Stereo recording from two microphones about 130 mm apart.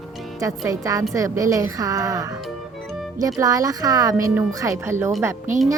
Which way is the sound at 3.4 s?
25° right (ahead or behind).